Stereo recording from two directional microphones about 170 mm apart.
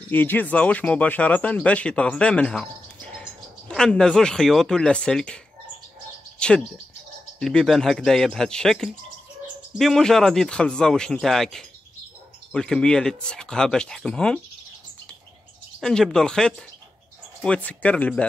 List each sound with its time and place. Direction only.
0.1 s speech: 10° left (ahead or behind)
6.4 s speech: 5° left (ahead or behind)
15.8 s speech: 5° left (ahead or behind)